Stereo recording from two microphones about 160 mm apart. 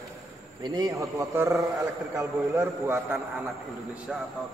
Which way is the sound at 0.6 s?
20° right (ahead or behind).